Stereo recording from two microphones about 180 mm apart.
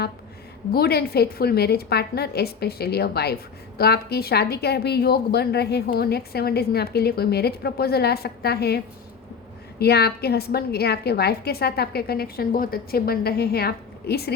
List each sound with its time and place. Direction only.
0.7 s a woman's voice: 60° left (ahead or behind)